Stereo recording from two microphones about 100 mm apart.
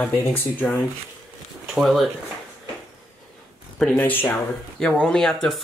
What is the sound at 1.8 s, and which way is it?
Speech, centre (ahead or behind).